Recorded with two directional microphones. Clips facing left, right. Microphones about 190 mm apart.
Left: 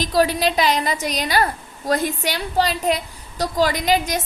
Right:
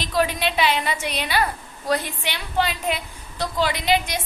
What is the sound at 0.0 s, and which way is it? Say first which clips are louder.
A woman's voice: left 4 dB; 40° left (ahead or behind).